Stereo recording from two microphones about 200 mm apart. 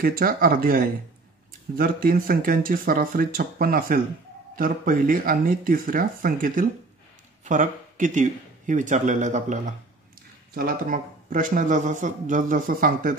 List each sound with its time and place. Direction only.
0.0 s speech: 45° right (ahead or behind)